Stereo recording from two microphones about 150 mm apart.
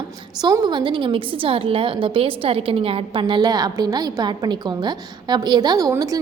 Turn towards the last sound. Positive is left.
turn(degrees=-25)  # may be behind; listen again after turning